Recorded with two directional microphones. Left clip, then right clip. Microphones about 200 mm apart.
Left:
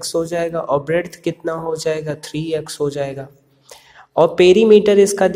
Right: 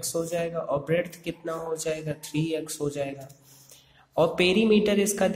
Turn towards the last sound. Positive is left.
turn(degrees=15)  # may be behind; listen again after turning